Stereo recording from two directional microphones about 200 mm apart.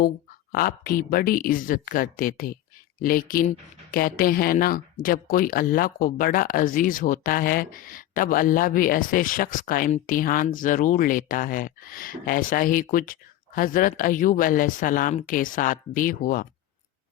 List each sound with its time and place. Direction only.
0.5 s speech: 45° left (ahead or behind)